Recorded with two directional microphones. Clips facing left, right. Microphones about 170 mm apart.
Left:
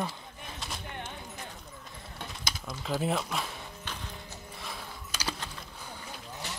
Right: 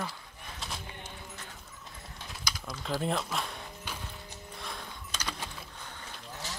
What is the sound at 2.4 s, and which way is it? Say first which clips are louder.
Typing: right 1 dB; 25° left (ahead or behind).